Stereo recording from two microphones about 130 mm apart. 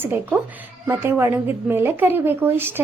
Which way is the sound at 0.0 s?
15° right (ahead or behind).